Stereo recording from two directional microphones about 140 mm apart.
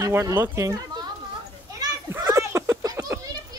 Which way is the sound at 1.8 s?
25° right (ahead or behind).